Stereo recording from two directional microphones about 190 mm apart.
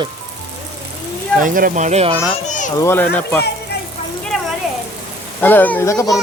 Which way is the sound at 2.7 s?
15° left (ahead or behind).